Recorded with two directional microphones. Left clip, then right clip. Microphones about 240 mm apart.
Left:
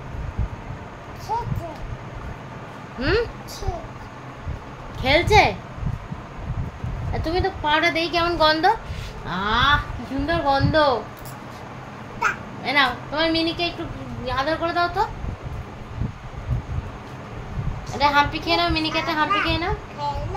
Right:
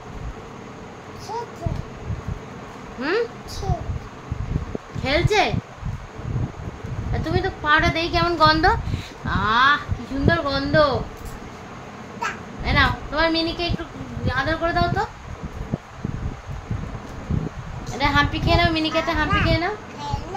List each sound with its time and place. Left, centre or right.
3.0 s a woman's voice: centre
5.0 s a woman's voice: centre
7.2 s a woman's voice: centre
12.6 s a woman's voice: centre
17.9 s a woman's voice: centre